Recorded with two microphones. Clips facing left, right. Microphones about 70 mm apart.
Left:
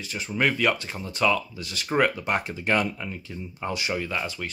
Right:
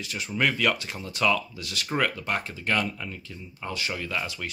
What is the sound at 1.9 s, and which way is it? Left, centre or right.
Speech, centre.